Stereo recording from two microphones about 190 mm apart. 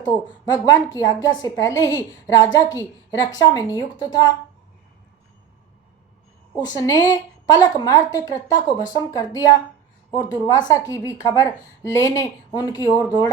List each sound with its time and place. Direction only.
0.0 s a woman's voice: 20° left (ahead or behind)
6.7 s a woman's voice: 20° left (ahead or behind)